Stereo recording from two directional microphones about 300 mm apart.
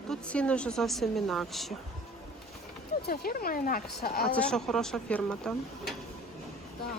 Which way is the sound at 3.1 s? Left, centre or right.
Left.